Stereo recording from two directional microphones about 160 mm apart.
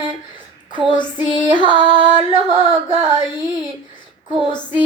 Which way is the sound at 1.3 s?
30° right (ahead or behind).